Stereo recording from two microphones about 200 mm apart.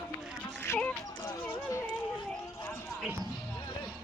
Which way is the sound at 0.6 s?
10° left (ahead or behind).